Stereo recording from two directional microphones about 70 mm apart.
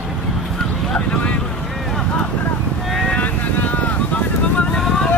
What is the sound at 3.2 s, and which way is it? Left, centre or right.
Vehicle, left.